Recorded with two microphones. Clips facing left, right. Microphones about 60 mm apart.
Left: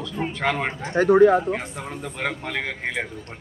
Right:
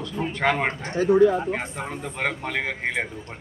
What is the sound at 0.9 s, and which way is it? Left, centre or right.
Speech, left.